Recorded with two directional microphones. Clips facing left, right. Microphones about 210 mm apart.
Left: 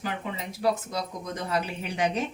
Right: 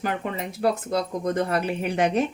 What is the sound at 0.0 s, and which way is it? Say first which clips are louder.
Speech: right 5 dB; 60° right (ahead or behind).